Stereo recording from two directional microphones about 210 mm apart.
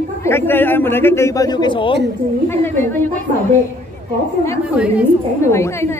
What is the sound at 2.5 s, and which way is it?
Speech, 10° left (ahead or behind).